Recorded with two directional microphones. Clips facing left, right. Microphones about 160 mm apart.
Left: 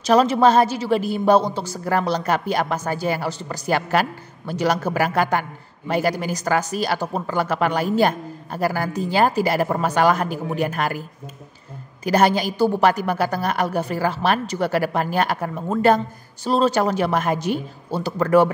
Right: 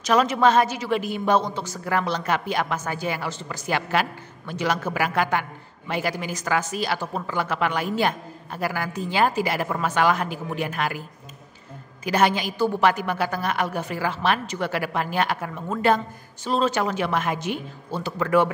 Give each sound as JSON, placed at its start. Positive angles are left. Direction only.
{"t": 0.0, "sound": "a woman's voice", "side_deg": 30}
{"t": 12.0, "sound": "a woman's voice", "side_deg": 40}